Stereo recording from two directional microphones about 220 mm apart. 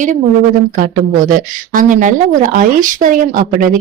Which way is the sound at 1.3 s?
40° right (ahead or behind).